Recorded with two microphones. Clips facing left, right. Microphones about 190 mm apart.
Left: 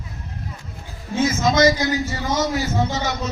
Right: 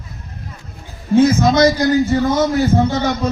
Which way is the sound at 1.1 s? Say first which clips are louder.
Right 7 dB; 55° right (ahead or behind).